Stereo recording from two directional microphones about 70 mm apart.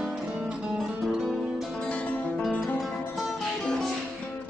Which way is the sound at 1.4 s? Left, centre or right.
Centre.